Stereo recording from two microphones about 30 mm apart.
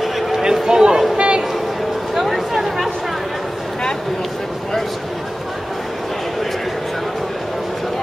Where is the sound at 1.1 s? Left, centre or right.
Right.